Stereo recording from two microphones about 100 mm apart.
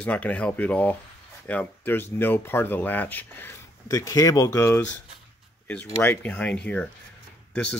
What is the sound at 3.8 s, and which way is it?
Speech, 35° left (ahead or behind).